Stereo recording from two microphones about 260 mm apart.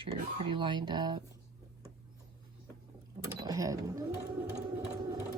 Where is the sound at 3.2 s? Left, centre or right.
Centre.